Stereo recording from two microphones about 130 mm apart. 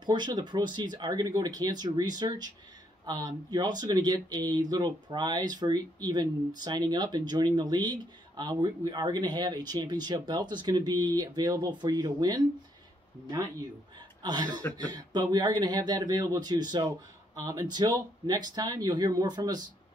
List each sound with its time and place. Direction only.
0.0 s speech: 35° right (ahead or behind)